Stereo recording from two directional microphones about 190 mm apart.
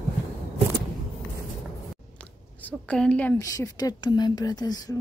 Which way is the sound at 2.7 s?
5° left (ahead or behind).